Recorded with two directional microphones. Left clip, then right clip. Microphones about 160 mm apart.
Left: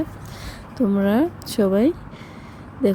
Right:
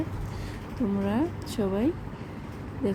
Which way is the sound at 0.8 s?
35° left (ahead or behind).